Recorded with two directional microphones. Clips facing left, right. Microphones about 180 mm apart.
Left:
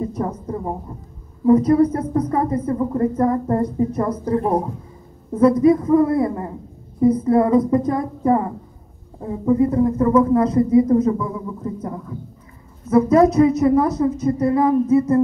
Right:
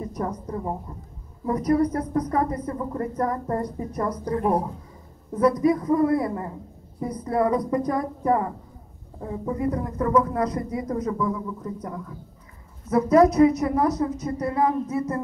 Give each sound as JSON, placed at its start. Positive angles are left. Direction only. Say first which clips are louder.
{"t": 0.0, "sound": "a woman's voice", "louder": "left 5 dB", "side_deg": 25}
{"t": 12.9, "sound": "a woman's voice", "louder": "left 4 dB", "side_deg": 25}